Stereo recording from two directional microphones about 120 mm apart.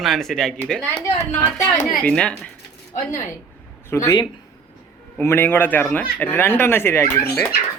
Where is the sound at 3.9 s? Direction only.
30° left (ahead or behind).